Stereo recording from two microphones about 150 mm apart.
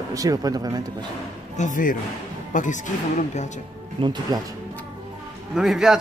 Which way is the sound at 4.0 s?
30° right (ahead or behind).